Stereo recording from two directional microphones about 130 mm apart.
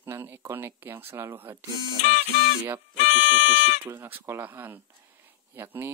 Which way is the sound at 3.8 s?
20° right (ahead or behind).